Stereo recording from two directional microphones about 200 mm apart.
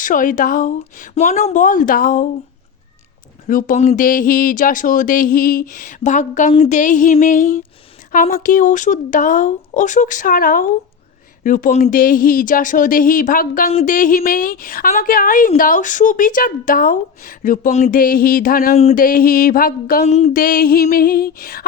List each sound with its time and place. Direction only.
0.0 s speech: 40° left (ahead or behind)
3.4 s speech: 40° left (ahead or behind)
18.7 s speech: 35° left (ahead or behind)
19.0 s speech: 45° left (ahead or behind)
20.1 s speech: 35° left (ahead or behind); by 21.6 s 50° left (ahead or behind)